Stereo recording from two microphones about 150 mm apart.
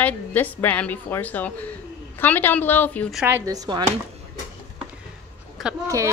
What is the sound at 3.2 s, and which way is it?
Speech, 20° right (ahead or behind).